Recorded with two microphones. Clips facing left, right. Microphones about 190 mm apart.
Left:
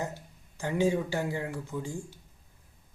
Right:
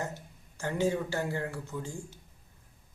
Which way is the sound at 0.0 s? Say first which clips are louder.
Left 1 dB; 15° left (ahead or behind).